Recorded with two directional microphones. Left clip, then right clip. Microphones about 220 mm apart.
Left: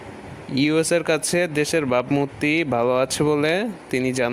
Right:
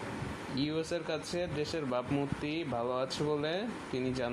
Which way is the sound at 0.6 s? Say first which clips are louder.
Left 16 dB; 50° left (ahead or behind).